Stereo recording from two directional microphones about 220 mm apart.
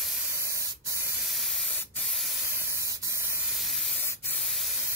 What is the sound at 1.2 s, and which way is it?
Spray, centre (ahead or behind).